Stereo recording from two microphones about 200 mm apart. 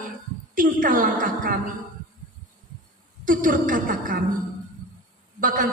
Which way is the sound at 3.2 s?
40° right (ahead or behind).